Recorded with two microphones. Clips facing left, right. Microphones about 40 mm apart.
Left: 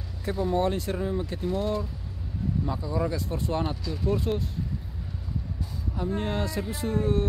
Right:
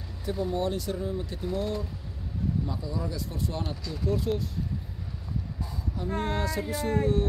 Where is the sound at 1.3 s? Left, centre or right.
Left.